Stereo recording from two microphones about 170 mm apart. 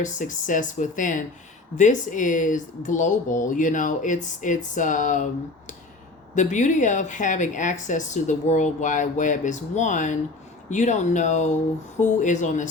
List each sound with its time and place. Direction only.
0.0 s a woman's voice: 50° left (ahead or behind)
6.3 s a woman's voice: 45° left (ahead or behind)